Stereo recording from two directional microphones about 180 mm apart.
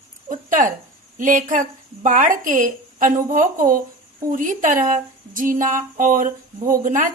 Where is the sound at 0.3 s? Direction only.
45° right (ahead or behind).